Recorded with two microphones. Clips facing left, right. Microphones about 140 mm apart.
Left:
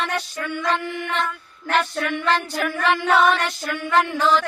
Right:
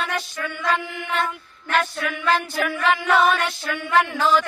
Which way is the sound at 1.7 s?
5° right (ahead or behind).